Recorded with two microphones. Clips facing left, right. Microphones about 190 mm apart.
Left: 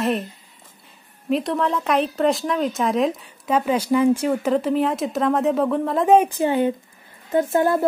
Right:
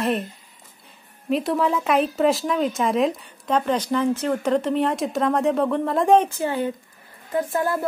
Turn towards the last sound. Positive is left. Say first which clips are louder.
# left 5 dB
turn(degrees=25)  # may be behind; listen again after turning